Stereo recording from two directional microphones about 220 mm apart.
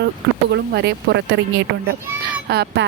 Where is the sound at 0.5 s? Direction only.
50° right (ahead or behind).